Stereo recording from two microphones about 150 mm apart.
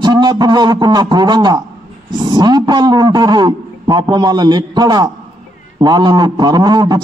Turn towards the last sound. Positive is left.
turn(degrees=-30)  # may be behind; listen again after turning